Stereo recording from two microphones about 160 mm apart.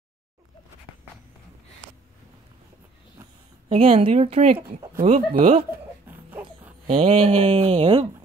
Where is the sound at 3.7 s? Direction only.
35° right (ahead or behind).